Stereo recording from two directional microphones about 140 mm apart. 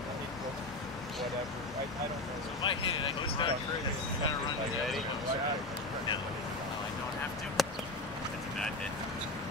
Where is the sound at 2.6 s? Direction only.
35° left (ahead or behind).